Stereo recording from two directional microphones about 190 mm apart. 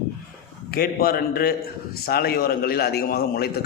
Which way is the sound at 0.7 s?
50° left (ahead or behind).